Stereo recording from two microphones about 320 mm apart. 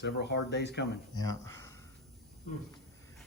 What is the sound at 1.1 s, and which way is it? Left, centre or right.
Speech, centre.